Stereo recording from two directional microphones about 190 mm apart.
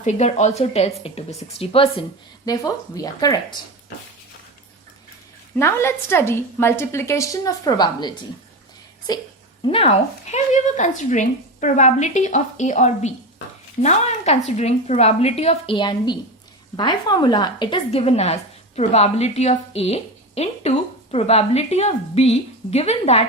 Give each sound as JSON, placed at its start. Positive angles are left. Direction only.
{"t": 0.0, "sound": "a woman's voice", "side_deg": 35}
{"t": 2.5, "sound": "a woman's voice", "side_deg": 20}
{"t": 5.5, "sound": "a woman's voice", "side_deg": 15}
{"t": 9.6, "sound": "a woman's voice", "side_deg": 30}
{"t": 10.3, "sound": "a woman's voice", "side_deg": 40}